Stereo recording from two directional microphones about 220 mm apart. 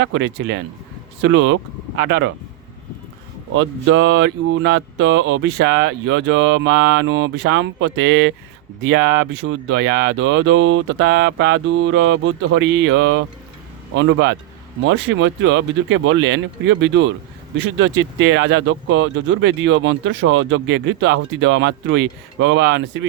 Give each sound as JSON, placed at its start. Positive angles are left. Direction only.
{"t": 0.0, "sound": "speech", "side_deg": -55}
{"t": 3.5, "sound": "speech", "side_deg": -65}